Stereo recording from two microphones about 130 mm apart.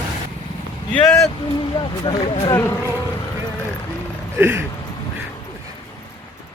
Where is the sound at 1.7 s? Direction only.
40° left (ahead or behind).